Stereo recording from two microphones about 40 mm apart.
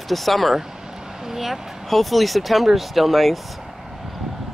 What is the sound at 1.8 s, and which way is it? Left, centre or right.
A child's voice, centre.